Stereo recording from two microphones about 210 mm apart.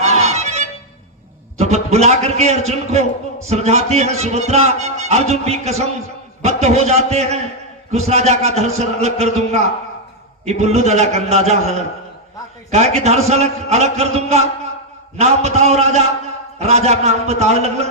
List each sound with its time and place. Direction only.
0.0 s music: 30° right (ahead or behind)
1.5 s a man's voice: 30° right (ahead or behind)